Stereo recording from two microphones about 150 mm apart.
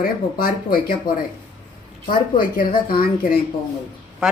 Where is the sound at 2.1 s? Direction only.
70° left (ahead or behind).